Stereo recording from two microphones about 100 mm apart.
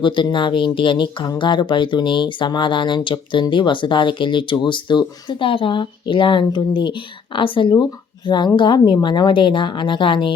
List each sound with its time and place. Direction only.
0.0 s speech: 55° left (ahead or behind)